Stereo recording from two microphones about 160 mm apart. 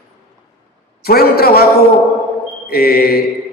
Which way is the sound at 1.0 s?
75° left (ahead or behind).